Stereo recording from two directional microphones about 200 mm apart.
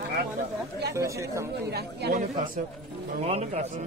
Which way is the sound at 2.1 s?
40° right (ahead or behind).